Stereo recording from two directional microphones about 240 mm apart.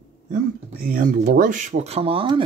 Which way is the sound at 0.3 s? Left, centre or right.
Right.